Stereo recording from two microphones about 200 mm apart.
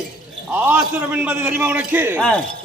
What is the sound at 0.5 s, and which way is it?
A man's voice, 10° right (ahead or behind).